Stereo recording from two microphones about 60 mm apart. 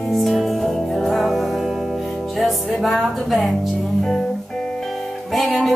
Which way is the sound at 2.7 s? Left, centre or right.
Centre.